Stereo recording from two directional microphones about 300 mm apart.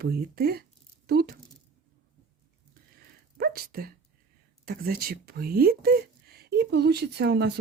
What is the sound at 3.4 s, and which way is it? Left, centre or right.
Speech, right.